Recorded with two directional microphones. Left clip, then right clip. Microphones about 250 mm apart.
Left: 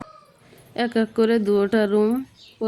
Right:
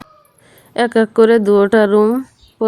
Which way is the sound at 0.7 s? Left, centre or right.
Centre.